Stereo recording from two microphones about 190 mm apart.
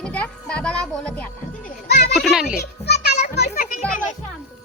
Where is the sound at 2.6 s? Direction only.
60° left (ahead or behind).